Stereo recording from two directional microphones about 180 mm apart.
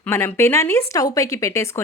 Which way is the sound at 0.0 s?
10° left (ahead or behind).